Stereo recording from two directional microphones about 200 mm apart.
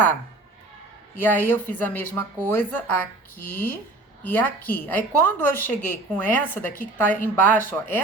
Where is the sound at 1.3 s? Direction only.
10° left (ahead or behind).